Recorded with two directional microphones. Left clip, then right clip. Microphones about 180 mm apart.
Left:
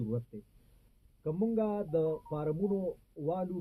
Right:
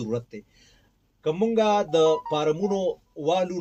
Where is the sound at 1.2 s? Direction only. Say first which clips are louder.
Right 11 dB; 20° right (ahead or behind).